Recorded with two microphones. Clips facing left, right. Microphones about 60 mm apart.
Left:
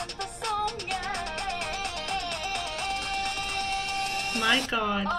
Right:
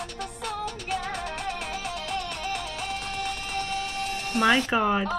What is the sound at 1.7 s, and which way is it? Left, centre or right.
Music, left.